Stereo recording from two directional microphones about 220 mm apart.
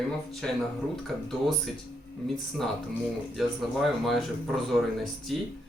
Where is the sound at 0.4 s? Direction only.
5° left (ahead or behind).